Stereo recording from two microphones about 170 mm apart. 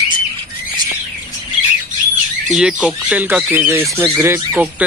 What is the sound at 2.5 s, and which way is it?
Speech, 5° right (ahead or behind).